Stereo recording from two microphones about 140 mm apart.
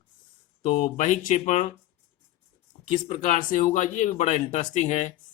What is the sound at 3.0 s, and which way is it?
Speech, 60° left (ahead or behind).